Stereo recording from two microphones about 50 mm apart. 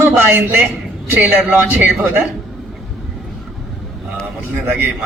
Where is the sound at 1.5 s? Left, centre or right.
Right.